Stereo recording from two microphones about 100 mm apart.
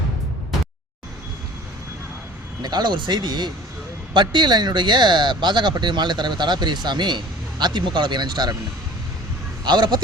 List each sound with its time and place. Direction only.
2.6 s speech: 45° right (ahead or behind)
9.6 s speech: 50° right (ahead or behind)